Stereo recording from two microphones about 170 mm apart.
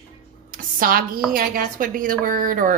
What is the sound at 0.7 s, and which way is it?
A woman's voice, 55° right (ahead or behind).